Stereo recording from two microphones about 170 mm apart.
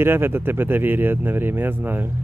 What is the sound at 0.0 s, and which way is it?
Speech, 15° right (ahead or behind).